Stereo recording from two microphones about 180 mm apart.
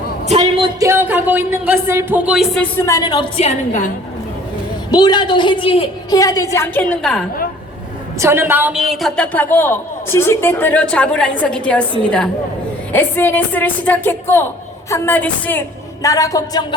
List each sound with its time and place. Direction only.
0.3 s speech: 35° right (ahead or behind)
0.8 s speech: 15° right (ahead or behind)
2.6 s a woman's voice: 15° left (ahead or behind); by 3.8 s 40° left (ahead or behind)
4.9 s a woman's voice: 25° left (ahead or behind)
8.2 s a woman's voice: 10° right (ahead or behind); by 16.6 s 20° left (ahead or behind)